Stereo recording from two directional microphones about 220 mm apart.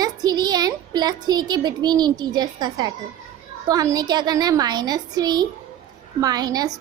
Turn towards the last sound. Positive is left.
turn(degrees=-20)  # may be behind; listen again after turning